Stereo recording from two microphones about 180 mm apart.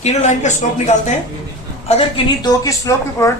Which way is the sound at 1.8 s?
30° left (ahead or behind).